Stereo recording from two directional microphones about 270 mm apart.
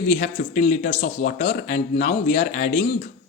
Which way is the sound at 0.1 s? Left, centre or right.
Left.